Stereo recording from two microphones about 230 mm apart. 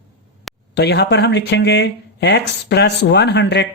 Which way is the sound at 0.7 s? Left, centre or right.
Left.